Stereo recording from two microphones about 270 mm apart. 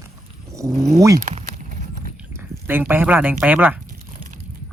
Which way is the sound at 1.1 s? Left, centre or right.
Right.